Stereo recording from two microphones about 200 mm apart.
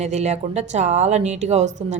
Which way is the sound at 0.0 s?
35° right (ahead or behind).